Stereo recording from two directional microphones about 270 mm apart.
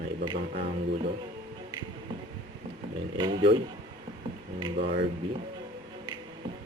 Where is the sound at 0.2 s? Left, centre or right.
Right.